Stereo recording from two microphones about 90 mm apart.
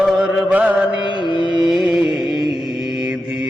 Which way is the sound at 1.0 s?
60° left (ahead or behind).